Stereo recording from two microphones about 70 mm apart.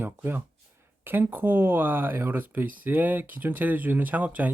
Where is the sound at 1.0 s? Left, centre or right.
Right.